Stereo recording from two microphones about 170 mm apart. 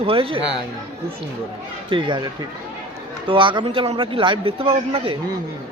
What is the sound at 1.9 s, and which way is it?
Speech, 30° right (ahead or behind).